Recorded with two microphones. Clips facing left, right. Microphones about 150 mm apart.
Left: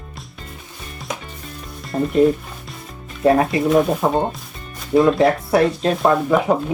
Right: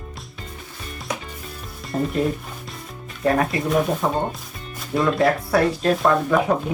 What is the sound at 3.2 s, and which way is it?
Speech, 25° left (ahead or behind).